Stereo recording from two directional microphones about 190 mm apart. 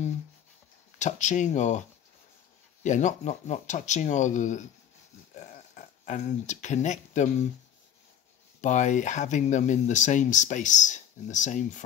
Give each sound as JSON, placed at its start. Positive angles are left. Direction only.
{"t": 0.9, "sound": "speech", "side_deg": 40}
{"t": 5.3, "sound": "a sound", "side_deg": 40}
{"t": 8.5, "sound": "speech", "side_deg": 40}